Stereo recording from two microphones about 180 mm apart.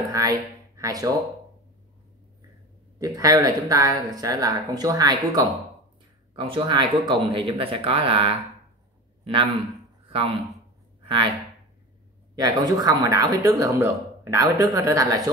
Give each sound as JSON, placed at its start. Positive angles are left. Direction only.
{"t": 0.1, "sound": "speech", "side_deg": -20}
{"t": 3.0, "sound": "a man's voice", "side_deg": -20}
{"t": 10.0, "sound": "a sound", "side_deg": -30}
{"t": 12.4, "sound": "speech", "side_deg": -20}